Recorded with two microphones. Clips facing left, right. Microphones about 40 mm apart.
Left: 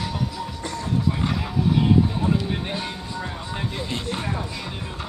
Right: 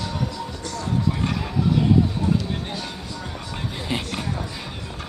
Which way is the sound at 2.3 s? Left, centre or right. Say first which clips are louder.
Even; left.